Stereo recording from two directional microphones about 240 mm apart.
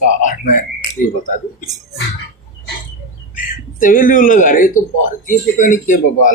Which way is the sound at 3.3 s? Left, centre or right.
Left.